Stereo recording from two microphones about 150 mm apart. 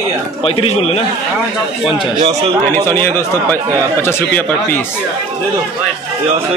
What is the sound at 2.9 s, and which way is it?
Speech, 15° left (ahead or behind).